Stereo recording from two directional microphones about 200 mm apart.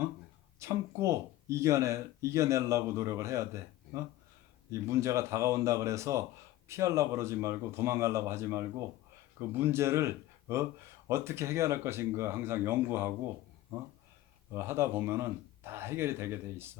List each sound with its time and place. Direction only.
0.6 s speech: 15° right (ahead or behind)
14.5 s speech: 15° right (ahead or behind)